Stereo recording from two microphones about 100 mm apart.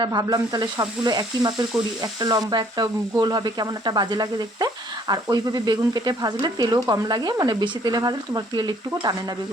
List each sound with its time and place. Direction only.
0.0 s frying: 40° right (ahead or behind)